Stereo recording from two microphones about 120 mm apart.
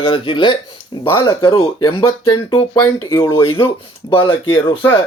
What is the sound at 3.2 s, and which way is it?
Speech, 45° left (ahead or behind).